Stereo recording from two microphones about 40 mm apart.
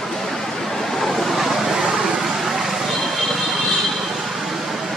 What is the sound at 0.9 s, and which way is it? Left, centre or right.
Vehicle, centre.